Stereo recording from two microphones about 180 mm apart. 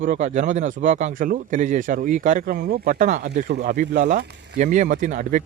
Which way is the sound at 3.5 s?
60° right (ahead or behind).